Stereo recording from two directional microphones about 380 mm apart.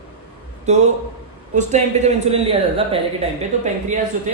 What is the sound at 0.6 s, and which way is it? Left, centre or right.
A man's voice, centre.